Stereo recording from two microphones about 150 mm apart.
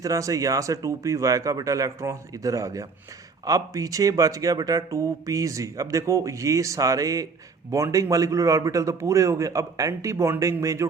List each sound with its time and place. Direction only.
0.0 s speech: 20° right (ahead or behind)